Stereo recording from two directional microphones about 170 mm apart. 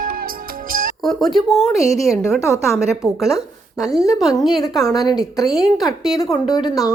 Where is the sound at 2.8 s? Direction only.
Centre (ahead or behind).